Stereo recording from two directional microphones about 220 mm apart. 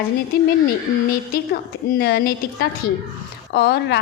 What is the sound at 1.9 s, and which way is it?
A woman's voice, 45° left (ahead or behind).